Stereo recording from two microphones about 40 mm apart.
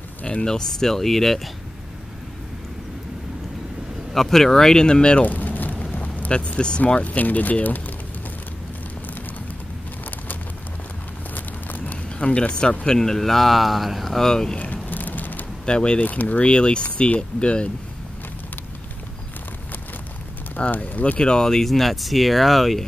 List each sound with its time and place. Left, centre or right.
0.4 s speech: centre
4.1 s speech: centre; by 5.2 s left
5.2 s a sound: left
6.3 s speech: left
7.0 s speech: left
11.3 s a sound: left
12.8 s speech: centre
14.2 s speech: centre
14.6 s vehicle: left
15.6 s speech: left
16.0 s speech: left
16.4 s speech: left
20.6 s speech: left; by 22.8 s centre